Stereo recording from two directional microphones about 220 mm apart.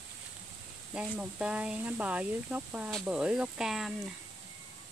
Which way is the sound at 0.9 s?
5° right (ahead or behind).